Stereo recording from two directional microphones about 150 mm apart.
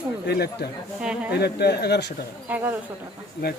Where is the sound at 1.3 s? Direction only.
90° left.